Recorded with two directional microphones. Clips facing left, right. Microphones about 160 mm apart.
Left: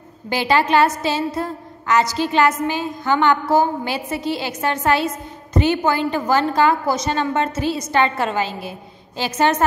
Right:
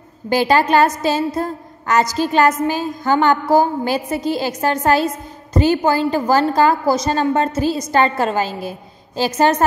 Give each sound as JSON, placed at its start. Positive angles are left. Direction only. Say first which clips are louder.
{"t": 0.3, "sound": "a woman's voice", "louder": "right 3 dB", "side_deg": -45}